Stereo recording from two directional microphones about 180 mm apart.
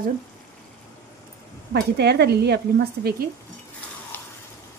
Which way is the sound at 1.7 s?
65° right (ahead or behind).